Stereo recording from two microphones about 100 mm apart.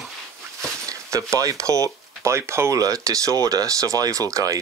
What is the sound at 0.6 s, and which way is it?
Speech, 30° right (ahead or behind).